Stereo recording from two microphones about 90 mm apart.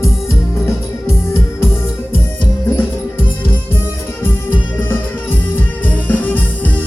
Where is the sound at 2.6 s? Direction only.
25° left (ahead or behind).